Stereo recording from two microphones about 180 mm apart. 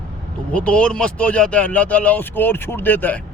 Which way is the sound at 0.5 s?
5° left (ahead or behind).